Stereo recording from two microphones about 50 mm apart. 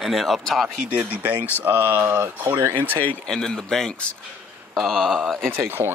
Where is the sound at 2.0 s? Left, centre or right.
Right.